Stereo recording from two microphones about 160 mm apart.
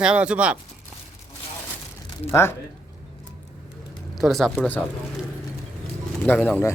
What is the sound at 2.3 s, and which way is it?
Speech, 15° left (ahead or behind).